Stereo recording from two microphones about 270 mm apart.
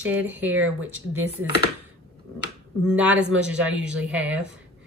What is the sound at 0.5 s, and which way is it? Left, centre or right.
Speech, right.